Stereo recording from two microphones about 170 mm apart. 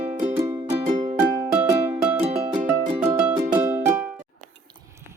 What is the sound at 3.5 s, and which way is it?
Music, 15° right (ahead or behind).